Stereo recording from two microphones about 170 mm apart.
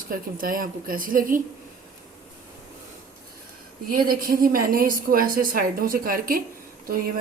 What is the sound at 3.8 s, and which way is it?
A woman's voice, 55° right (ahead or behind).